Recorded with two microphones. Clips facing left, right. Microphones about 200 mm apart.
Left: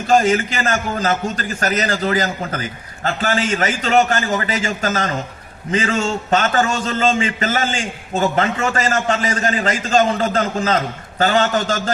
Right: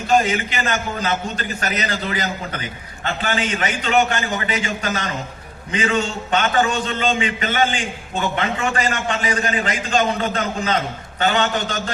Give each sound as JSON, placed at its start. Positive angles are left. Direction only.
{"t": 0.1, "sound": "a man's voice", "side_deg": 45}